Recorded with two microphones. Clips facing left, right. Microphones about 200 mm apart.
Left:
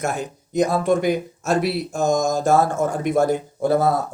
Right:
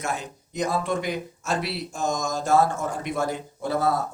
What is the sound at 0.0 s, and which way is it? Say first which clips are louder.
Speech: left 5 dB; 50° left (ahead or behind).